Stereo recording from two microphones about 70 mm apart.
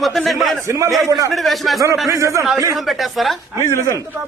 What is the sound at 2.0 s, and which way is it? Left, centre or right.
Speech, right.